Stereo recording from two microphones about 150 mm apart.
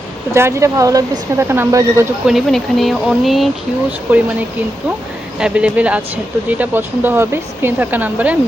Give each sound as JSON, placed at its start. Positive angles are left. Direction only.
{"t": 0.3, "sound": "speech", "side_deg": -20}
{"t": 2.2, "sound": "speech", "side_deg": 0}
{"t": 4.1, "sound": "speech", "side_deg": -15}
{"t": 5.4, "sound": "speech", "side_deg": -5}